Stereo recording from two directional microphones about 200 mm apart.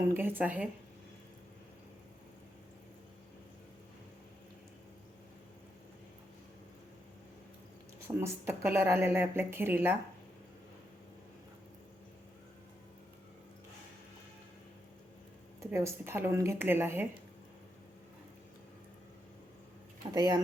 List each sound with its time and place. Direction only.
0.0 s speech: 10° right (ahead or behind)
8.0 s speech: 10° right (ahead or behind)
15.7 s speech: 15° right (ahead or behind)
20.1 s speech: 20° right (ahead or behind)